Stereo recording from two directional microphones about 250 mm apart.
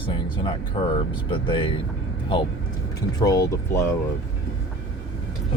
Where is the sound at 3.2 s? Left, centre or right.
Centre.